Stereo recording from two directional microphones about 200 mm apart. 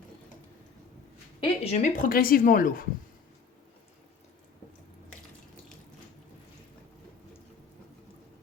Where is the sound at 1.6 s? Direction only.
35° left (ahead or behind).